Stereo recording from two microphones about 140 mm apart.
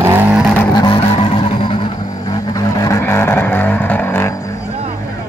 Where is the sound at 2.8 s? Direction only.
20° left (ahead or behind).